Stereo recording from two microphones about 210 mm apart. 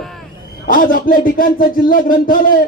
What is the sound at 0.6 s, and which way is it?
A man's voice, 40° left (ahead or behind).